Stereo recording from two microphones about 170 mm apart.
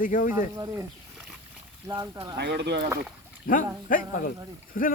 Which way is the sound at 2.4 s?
85° right.